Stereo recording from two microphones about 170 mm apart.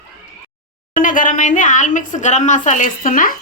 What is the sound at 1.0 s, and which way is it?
A woman's voice, 50° left (ahead or behind).